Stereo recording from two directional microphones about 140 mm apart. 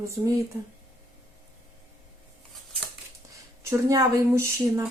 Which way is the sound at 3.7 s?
25° right (ahead or behind).